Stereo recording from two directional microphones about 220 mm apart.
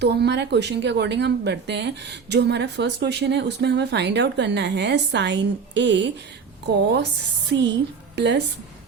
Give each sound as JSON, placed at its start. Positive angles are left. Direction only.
{"t": 0.0, "sound": "speech", "side_deg": -50}